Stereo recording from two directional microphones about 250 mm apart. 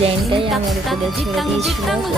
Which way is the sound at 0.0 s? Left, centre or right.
Right.